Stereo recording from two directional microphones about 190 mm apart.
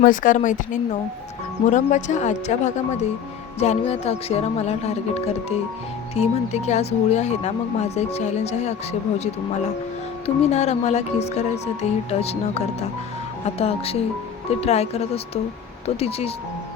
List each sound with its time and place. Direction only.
0.0 s speech: 45° left (ahead or behind)